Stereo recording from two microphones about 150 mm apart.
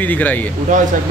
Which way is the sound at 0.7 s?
60° right (ahead or behind).